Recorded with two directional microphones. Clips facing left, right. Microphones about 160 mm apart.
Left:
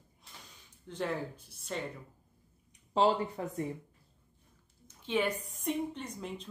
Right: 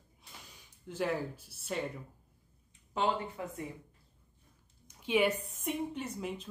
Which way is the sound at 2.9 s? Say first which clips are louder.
Left 5 dB; 30° left (ahead or behind).